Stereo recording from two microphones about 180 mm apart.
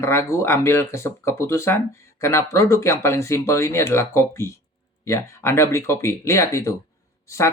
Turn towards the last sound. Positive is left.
turn(degrees=15)  # may be behind; listen again after turning